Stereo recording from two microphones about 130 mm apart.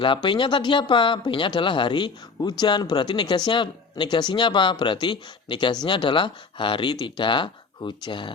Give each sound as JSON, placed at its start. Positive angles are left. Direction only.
{"t": 0.0, "sound": "speech", "side_deg": 40}